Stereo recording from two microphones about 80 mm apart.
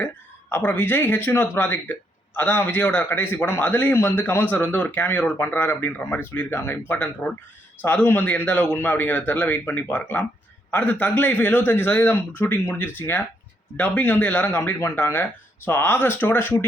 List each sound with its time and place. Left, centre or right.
0.5 s speech: left